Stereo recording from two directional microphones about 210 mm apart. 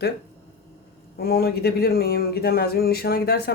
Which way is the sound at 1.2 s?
45° left (ahead or behind).